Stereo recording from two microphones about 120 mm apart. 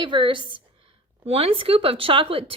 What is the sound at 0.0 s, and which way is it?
Speech, 45° right (ahead or behind).